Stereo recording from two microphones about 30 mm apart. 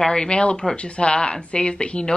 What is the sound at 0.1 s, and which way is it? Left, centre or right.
Speech, left.